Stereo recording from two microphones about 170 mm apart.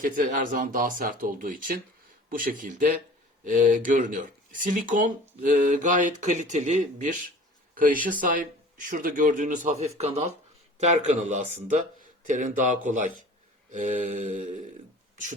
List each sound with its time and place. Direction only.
0.0 s speech: 50° right (ahead or behind)